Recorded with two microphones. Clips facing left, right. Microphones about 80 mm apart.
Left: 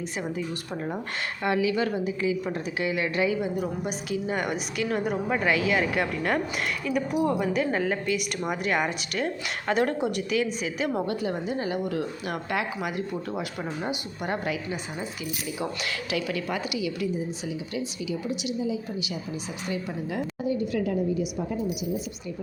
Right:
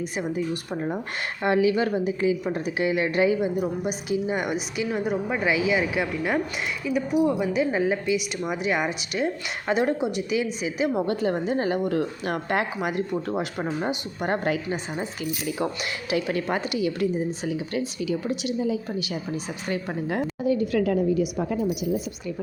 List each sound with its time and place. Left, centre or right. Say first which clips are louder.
0.2 s a woman's voice: right 4 dB; centre
1.4 s a woman's voice: right 4 dB; right
3.6 s a woman's voice: right 3 dB; centre
4.9 s a woman's voice: right 1 dB; centre
11.0 s a woman's voice: right 4 dB; right
15.8 s a woman's voice: right 3 dB; right
20.5 s a woman's voice: right 5 dB; right